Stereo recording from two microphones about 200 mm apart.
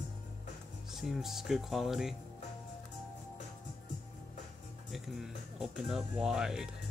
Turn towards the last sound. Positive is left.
turn(degrees=-5)  # may be behind; listen again after turning